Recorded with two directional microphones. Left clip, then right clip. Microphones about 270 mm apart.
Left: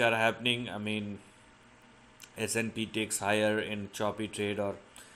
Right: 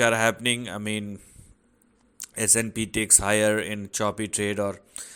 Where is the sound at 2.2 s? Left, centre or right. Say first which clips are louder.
Right 7 dB; right.